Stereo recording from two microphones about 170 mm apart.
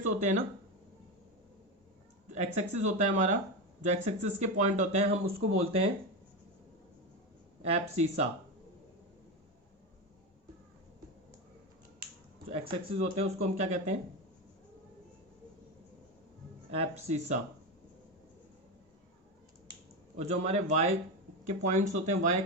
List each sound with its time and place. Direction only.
0.2 s speech: 45° right (ahead or behind)
2.3 s speech: 45° right (ahead or behind)
7.6 s speech: 40° right (ahead or behind)
12.5 s speech: 35° right (ahead or behind)
16.7 s speech: 40° right (ahead or behind)
20.2 s speech: 40° right (ahead or behind)